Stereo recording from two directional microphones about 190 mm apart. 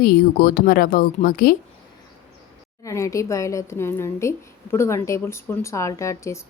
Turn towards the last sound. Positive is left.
turn(degrees=15)  # may be behind; listen again after turning